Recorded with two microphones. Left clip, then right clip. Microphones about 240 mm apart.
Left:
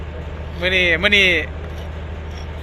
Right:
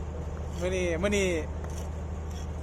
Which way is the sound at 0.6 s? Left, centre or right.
Centre.